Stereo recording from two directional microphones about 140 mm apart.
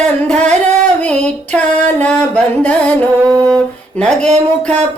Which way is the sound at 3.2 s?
25° right (ahead or behind).